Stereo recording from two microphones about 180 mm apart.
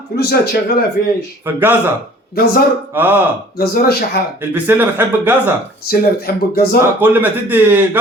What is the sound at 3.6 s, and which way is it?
Speech, 60° left (ahead or behind).